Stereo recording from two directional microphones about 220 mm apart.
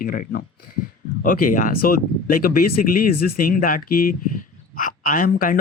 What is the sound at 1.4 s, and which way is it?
Speech, 40° left (ahead or behind).